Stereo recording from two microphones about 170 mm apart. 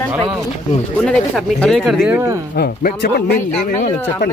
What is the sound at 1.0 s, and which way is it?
Speech, 5° left (ahead or behind).